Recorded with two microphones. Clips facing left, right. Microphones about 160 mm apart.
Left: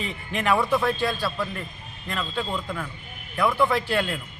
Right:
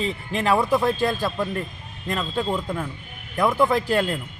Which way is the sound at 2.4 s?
20° right (ahead or behind).